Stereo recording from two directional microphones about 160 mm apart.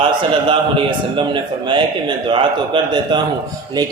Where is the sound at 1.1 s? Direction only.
30° right (ahead or behind).